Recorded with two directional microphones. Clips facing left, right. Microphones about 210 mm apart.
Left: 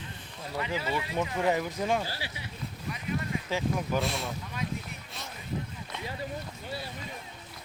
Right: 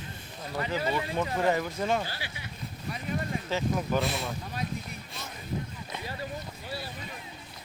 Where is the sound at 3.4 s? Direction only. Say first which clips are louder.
Right 1 dB; 10° left (ahead or behind).